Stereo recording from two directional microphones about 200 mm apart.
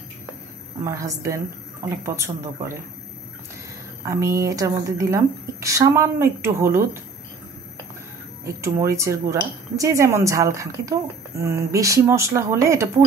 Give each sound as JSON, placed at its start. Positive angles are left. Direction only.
{"t": 0.8, "sound": "speech", "side_deg": -15}
{"t": 4.0, "sound": "speech", "side_deg": -15}
{"t": 8.5, "sound": "speech", "side_deg": -15}